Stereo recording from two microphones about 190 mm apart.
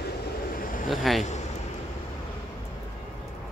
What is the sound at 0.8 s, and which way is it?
Speech, centre (ahead or behind).